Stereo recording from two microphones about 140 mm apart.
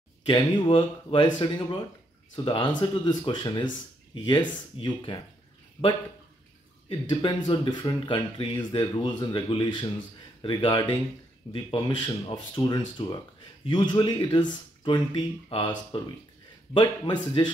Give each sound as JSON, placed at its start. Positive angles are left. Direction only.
{"t": 0.3, "sound": "speech", "side_deg": 35}
{"t": 6.9, "sound": "speech", "side_deg": 35}